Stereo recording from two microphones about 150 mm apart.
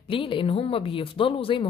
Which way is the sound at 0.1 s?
35° left (ahead or behind).